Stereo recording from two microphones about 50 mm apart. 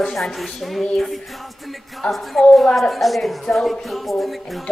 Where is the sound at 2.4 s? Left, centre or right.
Centre.